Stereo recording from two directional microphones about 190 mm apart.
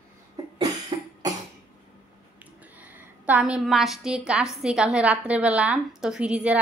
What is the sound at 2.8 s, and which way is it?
A woman's voice, 10° right (ahead or behind).